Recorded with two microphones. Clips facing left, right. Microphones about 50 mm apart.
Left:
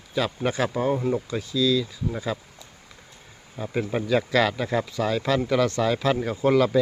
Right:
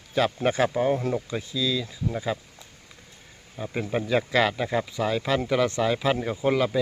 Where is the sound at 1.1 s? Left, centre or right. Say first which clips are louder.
Left 2 dB; right.